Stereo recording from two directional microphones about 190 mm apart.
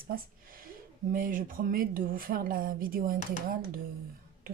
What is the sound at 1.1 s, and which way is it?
A woman's voice, 45° right (ahead or behind).